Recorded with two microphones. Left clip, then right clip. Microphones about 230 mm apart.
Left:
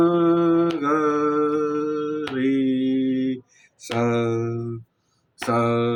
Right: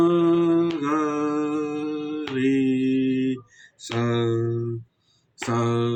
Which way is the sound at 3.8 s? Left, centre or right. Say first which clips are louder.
Left 3 dB; centre.